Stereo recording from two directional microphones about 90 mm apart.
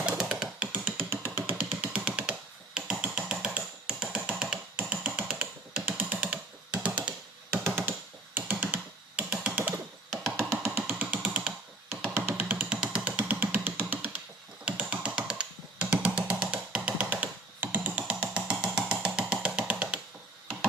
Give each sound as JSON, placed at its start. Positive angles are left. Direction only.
{"t": 0.2, "sound": "music", "side_deg": -5}
{"t": 6.0, "sound": "typing", "side_deg": -15}
{"t": 6.3, "sound": "music", "side_deg": -15}
{"t": 7.5, "sound": "synthesizer", "side_deg": -25}
{"t": 8.4, "sound": "computer keyboard", "side_deg": -20}
{"t": 10.7, "sound": "music", "side_deg": -15}
{"t": 11.2, "sound": "computer keyboard", "side_deg": -10}
{"t": 11.9, "sound": "music", "side_deg": -25}
{"t": 14.6, "sound": "music", "side_deg": -15}